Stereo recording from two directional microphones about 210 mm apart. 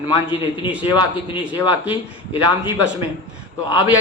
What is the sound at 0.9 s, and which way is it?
Speech, 25° left (ahead or behind).